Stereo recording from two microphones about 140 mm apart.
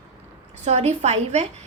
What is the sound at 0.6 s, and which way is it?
Speech, 50° right (ahead or behind).